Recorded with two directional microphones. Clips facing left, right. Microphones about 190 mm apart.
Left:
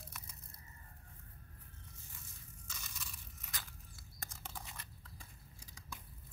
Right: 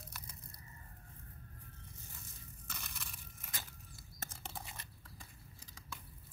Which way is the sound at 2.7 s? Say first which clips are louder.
Right 3 dB; 60° right (ahead or behind).